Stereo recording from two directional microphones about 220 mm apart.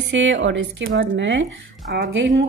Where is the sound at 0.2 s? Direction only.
55° right (ahead or behind).